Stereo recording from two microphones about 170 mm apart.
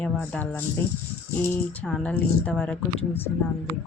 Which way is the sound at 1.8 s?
5° left (ahead or behind).